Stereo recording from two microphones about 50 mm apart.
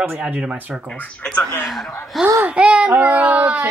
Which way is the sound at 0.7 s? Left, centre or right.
Centre.